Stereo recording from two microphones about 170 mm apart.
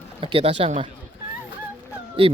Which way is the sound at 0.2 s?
30° right (ahead or behind).